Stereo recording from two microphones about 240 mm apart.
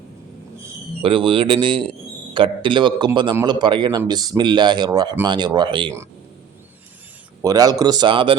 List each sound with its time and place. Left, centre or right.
1.0 s a man's voice: right
7.4 s speech: centre